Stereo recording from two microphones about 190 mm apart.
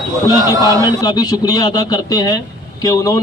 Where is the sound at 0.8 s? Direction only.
20° left (ahead or behind).